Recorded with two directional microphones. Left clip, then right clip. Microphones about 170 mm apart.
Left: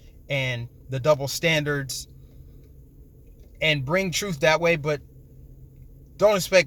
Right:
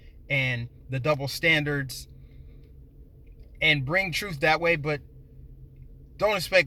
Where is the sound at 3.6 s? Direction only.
20° left (ahead or behind).